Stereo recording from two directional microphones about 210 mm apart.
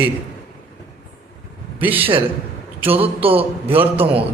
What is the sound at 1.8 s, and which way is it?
Speech, 10° right (ahead or behind).